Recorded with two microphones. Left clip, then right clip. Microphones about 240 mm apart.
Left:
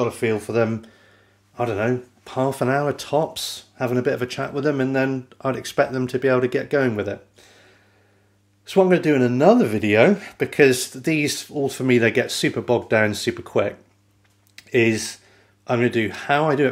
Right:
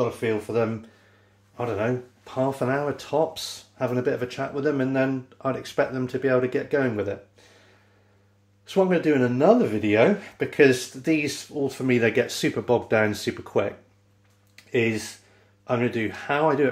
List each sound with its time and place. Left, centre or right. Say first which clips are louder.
0.0 s speech: left 3 dB; left
8.6 s speech: left 4 dB; left